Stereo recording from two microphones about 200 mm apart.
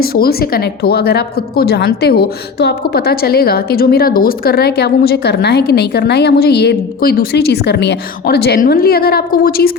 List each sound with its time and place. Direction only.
0.0 s a woman's voice: 50° left (ahead or behind)